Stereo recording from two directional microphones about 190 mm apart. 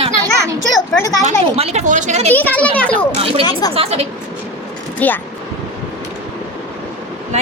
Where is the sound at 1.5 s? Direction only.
35° right (ahead or behind).